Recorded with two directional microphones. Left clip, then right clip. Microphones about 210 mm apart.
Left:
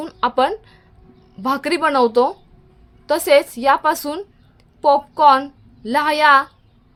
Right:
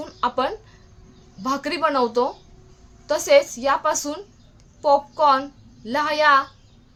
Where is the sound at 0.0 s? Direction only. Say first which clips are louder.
Left 5 dB; 50° left (ahead or behind).